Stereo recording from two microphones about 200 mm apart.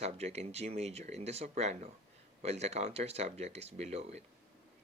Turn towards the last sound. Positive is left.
turn(degrees=-30)  # may be behind; listen again after turning